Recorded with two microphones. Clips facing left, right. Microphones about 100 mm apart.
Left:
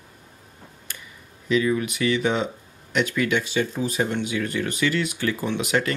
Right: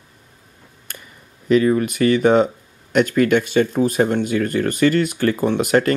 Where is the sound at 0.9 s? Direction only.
50° right (ahead or behind).